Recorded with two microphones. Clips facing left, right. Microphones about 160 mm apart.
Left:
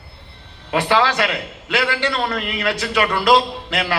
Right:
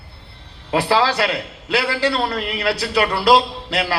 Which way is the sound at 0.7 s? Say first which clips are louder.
Even; 35° right (ahead or behind).